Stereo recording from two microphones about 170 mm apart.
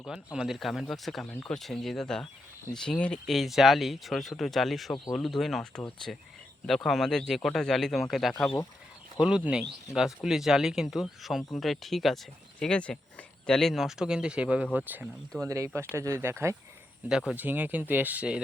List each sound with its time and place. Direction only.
0.0 s speech: 5° right (ahead or behind)
9.2 s speech: 5° right (ahead or behind)
17.1 s speech: 5° right (ahead or behind)